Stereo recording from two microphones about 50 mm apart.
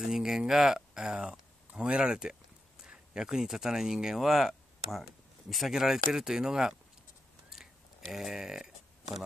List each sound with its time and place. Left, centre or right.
0.0 s speech: centre
7.5 s a sound: centre
8.1 s speech: centre